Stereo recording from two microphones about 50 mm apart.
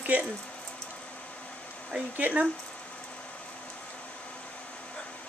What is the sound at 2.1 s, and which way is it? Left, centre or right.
Speech, right.